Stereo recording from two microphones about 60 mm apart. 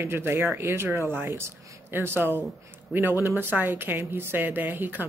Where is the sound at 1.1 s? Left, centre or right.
Right.